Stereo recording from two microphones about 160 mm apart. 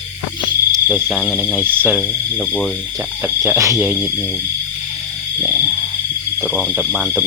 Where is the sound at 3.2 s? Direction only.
20° right (ahead or behind).